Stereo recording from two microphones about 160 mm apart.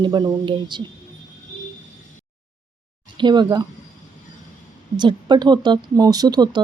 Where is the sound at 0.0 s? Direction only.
25° right (ahead or behind).